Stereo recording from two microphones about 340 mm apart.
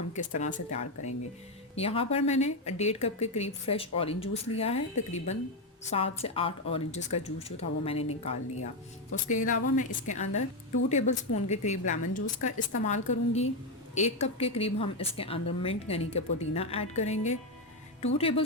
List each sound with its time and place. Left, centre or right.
0.2 s a woman's voice: left
9.2 s a woman's voice: left